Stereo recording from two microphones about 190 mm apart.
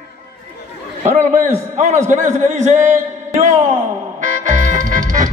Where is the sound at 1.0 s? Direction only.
40° right (ahead or behind).